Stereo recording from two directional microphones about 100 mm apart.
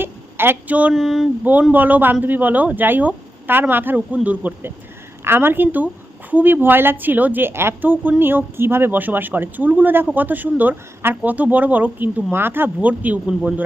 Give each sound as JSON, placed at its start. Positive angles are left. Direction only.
{"t": 0.0, "sound": "speech", "side_deg": -20}
{"t": 0.9, "sound": "a sound", "side_deg": 0}
{"t": 1.7, "sound": "a woman's voice", "side_deg": -15}